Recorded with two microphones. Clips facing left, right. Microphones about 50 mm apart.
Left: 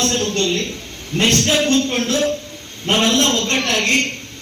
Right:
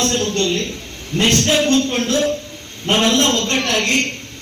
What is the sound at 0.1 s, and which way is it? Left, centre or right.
Speech, centre.